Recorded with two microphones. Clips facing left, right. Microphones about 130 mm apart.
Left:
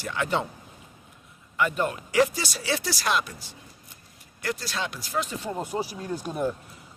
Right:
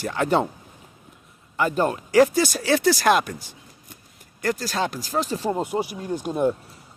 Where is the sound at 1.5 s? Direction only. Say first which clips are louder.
Right 4 dB; 35° right (ahead or behind).